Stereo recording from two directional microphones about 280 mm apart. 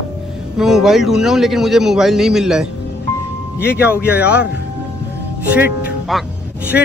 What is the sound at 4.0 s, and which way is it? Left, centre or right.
Speech, centre.